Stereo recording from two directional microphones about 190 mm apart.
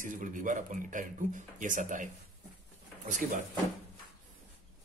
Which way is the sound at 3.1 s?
45° right (ahead or behind).